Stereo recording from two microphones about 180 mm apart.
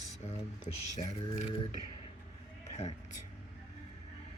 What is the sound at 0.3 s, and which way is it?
Speech, 40° left (ahead or behind).